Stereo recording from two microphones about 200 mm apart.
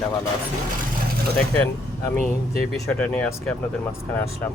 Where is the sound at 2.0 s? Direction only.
5° left (ahead or behind).